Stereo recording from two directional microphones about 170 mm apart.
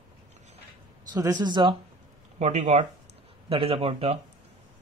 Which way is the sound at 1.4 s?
25° right (ahead or behind).